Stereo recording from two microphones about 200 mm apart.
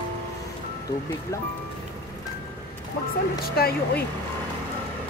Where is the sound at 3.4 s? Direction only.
50° left (ahead or behind).